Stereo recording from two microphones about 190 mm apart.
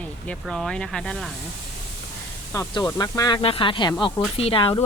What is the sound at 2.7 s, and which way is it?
Speech, 20° left (ahead or behind).